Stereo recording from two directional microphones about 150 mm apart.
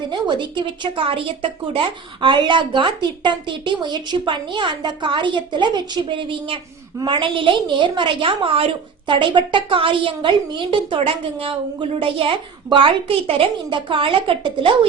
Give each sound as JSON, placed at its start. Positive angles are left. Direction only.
{"t": 0.1, "sound": "a woman's voice", "side_deg": -30}